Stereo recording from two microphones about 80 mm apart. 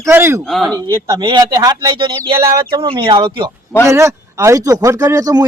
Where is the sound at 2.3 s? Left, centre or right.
Right.